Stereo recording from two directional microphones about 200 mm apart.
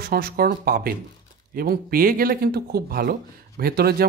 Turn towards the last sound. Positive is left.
turn(degrees=-50)  # may be behind; listen again after turning